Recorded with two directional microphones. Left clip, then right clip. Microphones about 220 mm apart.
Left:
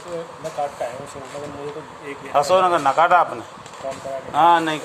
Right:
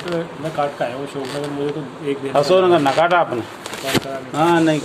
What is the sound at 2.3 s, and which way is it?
Speech, 50° left (ahead or behind).